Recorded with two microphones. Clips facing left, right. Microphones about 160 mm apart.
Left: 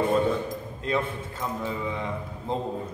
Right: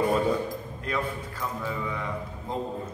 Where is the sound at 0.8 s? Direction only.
25° left (ahead or behind).